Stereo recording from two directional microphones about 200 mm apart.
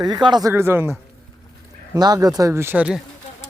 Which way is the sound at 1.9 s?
20° right (ahead or behind).